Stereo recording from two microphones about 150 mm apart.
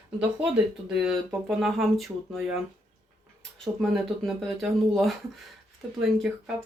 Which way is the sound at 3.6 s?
Centre (ahead or behind).